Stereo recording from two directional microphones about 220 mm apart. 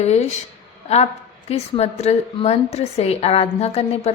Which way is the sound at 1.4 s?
30° left (ahead or behind).